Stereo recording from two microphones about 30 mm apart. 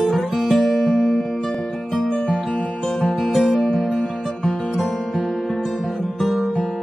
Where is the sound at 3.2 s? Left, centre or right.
Centre.